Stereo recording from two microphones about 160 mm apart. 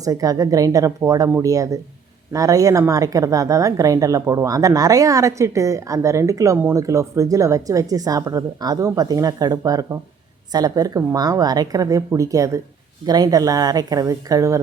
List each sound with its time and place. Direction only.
0.0 s a woman's voice: 20° right (ahead or behind)